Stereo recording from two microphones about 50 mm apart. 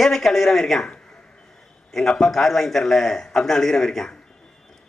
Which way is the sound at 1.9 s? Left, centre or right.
Centre.